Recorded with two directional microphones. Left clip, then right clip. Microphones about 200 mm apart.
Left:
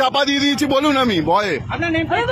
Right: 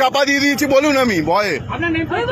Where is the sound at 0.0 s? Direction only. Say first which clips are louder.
Right 2 dB; 5° left (ahead or behind).